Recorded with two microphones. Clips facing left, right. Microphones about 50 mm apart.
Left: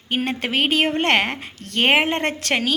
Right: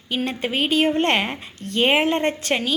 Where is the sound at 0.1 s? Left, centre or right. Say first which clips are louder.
Left 1 dB; left.